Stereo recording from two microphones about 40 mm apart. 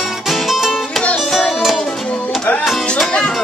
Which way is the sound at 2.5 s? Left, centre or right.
Left.